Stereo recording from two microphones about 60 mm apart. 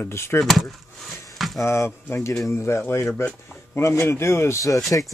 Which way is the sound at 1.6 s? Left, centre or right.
Left.